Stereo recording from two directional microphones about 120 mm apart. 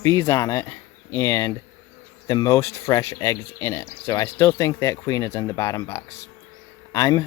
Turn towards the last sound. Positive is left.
turn(degrees=30)  # may be behind; listen again after turning